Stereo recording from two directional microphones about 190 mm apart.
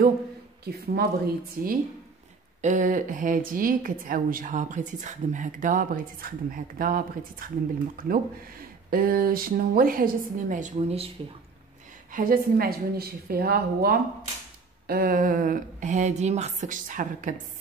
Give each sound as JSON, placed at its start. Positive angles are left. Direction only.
{"t": 0.7, "sound": "a woman's voice", "side_deg": -55}
{"t": 2.6, "sound": "a woman's voice", "side_deg": -40}
{"t": 12.1, "sound": "a woman's voice", "side_deg": -45}